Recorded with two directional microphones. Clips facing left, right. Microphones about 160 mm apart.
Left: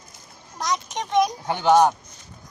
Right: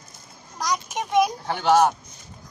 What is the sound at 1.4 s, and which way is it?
Child singing, 15° left (ahead or behind).